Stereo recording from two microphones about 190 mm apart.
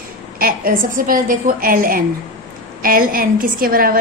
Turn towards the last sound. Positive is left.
turn(degrees=-50)  # may be behind; listen again after turning